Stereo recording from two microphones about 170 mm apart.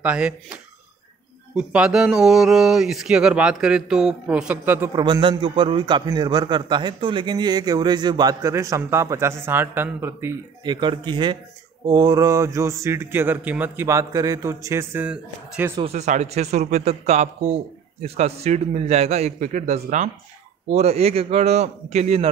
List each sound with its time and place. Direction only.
0.0 s speech: 5° right (ahead or behind)
4.9 s a man's voice: 25° right (ahead or behind)
10.7 s a man's voice: 25° right (ahead or behind); by 15.7 s 10° right (ahead or behind)
15.8 s a man's voice: 40° right (ahead or behind)